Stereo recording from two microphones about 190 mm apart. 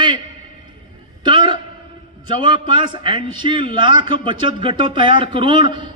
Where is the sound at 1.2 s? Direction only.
25° right (ahead or behind).